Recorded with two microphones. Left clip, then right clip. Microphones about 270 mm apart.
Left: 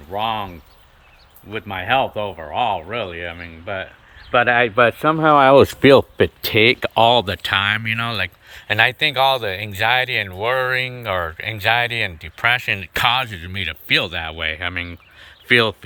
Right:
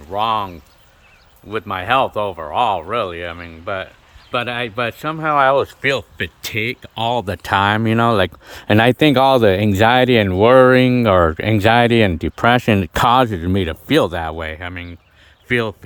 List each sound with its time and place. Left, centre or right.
0.1 s speech: centre
4.3 s speech: centre; by 5.4 s left
5.4 s speech: left
6.1 s speech: centre
7.0 s speech: centre